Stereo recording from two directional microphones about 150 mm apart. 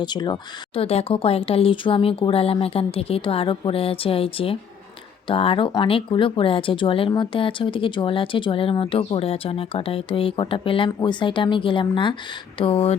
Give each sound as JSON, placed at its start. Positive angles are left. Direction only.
{"t": 0.0, "sound": "speech", "side_deg": 30}
{"t": 0.8, "sound": "speech", "side_deg": 40}